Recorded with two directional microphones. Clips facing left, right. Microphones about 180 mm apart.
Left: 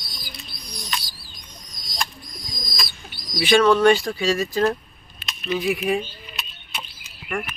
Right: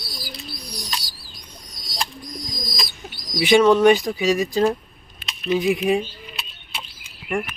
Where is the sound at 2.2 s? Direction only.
40° right (ahead or behind).